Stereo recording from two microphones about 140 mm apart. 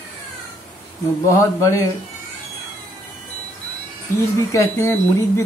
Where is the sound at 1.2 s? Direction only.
20° left (ahead or behind).